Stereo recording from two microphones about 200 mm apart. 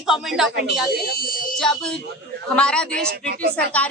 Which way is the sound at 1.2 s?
45° left (ahead or behind).